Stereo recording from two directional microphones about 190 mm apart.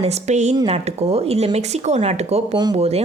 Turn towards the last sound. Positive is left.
turn(degrees=-35)  # may be behind; listen again after turning